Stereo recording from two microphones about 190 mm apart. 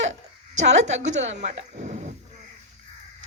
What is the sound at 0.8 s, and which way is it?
A woman's voice, 35° right (ahead or behind).